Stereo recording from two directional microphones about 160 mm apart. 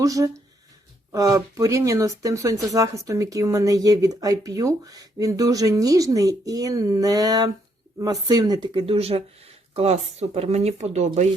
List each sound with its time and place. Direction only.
0.0 s speech: 20° right (ahead or behind); by 11.3 s 45° right (ahead or behind)